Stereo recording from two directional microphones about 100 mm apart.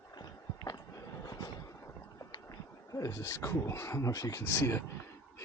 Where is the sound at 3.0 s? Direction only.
35° left (ahead or behind).